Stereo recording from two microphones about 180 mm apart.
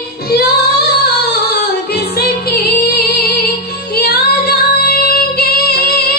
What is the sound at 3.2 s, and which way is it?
Music, 60° left (ahead or behind).